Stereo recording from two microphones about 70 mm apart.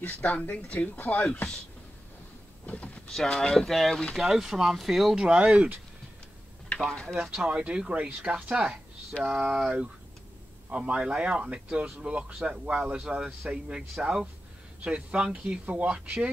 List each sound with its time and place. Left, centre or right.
0.0 s speech: left
2.6 s speech: left
3.1 s speech: centre
6.8 s speech: centre
7.2 s speech: centre